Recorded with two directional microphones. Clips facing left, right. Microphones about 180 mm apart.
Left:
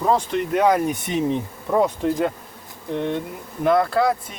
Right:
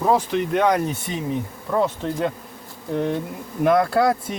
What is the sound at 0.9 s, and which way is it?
Bee, 20° left (ahead or behind).